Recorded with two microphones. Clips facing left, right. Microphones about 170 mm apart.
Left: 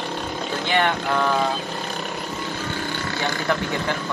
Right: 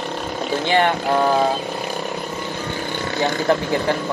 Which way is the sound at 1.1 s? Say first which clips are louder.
Right 6 dB; 40° right (ahead or behind).